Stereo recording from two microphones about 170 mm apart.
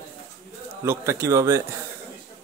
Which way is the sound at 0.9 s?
15° right (ahead or behind).